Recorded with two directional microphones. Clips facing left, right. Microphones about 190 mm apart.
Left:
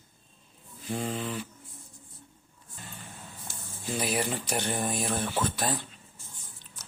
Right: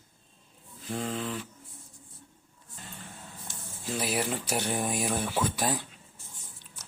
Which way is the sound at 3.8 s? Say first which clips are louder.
Left 1 dB; centre (ahead or behind).